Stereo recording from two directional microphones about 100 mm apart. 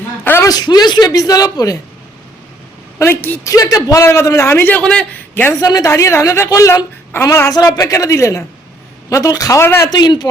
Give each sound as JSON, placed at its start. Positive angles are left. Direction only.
{"t": 0.4, "sound": "a woman's voice", "side_deg": 45}
{"t": 3.0, "sound": "a woman's voice", "side_deg": 20}
{"t": 3.4, "sound": "a woman's voice", "side_deg": 35}
{"t": 4.8, "sound": "a man's voice", "side_deg": 10}
{"t": 5.3, "sound": "a woman's voice", "side_deg": 20}
{"t": 5.5, "sound": "a woman's voice", "side_deg": 35}
{"t": 9.9, "sound": "a man's voice", "side_deg": 45}